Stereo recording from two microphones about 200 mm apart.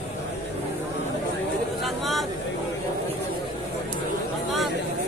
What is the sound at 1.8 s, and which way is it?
Vehicle, centre (ahead or behind).